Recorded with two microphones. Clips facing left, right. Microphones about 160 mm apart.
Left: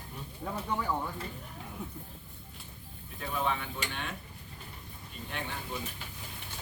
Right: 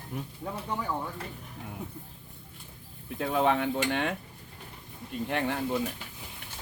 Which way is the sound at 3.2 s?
80° right.